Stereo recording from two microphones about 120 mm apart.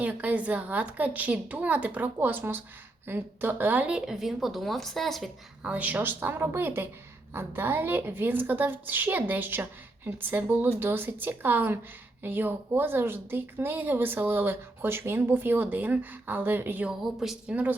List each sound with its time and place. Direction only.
0.0 s speech: 15° right (ahead or behind)
5.6 s speech: 10° right (ahead or behind)
16.9 s speech: 5° right (ahead or behind)